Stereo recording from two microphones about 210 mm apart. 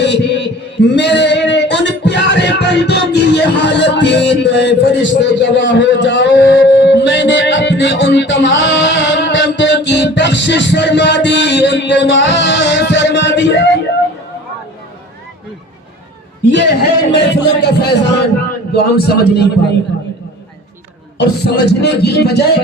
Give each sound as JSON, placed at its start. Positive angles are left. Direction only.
{"t": 0.0, "sound": "heart sounds", "side_deg": 55}
{"t": 0.9, "sound": "music", "side_deg": 55}
{"t": 16.5, "sound": "a man's voice", "side_deg": 55}
{"t": 21.2, "sound": "a man's voice", "side_deg": 50}